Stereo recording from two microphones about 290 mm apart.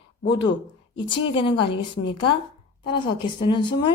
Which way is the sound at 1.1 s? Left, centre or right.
Centre.